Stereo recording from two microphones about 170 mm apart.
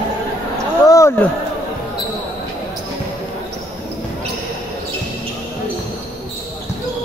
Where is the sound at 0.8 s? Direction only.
20° left (ahead or behind).